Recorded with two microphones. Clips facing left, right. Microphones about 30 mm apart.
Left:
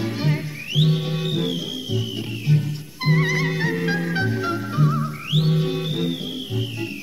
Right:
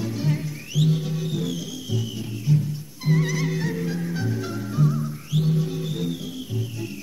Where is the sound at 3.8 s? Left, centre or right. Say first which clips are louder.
Left 5 dB; left.